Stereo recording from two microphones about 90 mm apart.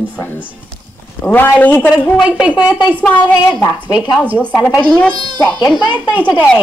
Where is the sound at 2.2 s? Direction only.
15° right (ahead or behind).